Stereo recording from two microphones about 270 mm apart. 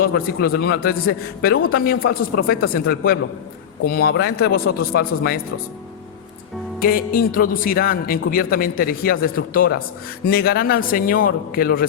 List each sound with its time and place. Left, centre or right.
0.0 s speech: left
6.7 s speech: left